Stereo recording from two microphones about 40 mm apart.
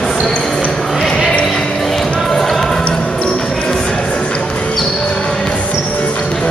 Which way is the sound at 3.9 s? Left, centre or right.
Left.